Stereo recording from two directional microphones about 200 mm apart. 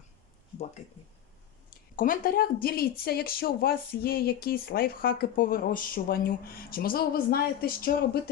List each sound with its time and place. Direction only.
2.0 s speech: 45° left (ahead or behind)